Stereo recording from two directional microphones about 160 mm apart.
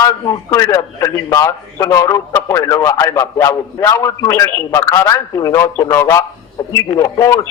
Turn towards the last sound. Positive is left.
turn(degrees=20)  # may be behind; listen again after turning